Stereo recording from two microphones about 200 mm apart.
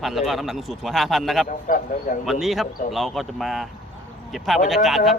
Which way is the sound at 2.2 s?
Centre (ahead or behind).